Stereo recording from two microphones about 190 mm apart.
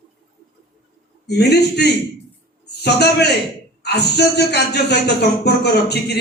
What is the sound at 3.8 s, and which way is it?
Speech, 60° left (ahead or behind).